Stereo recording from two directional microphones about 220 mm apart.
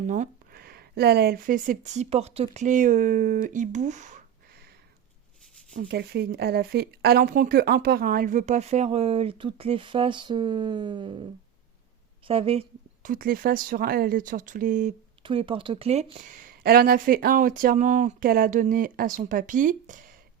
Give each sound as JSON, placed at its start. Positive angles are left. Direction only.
{"t": 0.0, "sound": "speech", "side_deg": -35}
{"t": 5.9, "sound": "speech", "side_deg": -50}
{"t": 12.3, "sound": "speech", "side_deg": -25}
{"t": 15.2, "sound": "speech", "side_deg": -25}